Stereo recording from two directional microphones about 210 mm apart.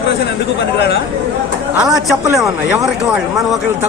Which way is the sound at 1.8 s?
Centre (ahead or behind).